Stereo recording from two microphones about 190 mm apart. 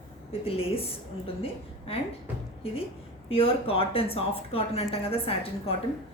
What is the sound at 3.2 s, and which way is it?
Speech, 30° left (ahead or behind).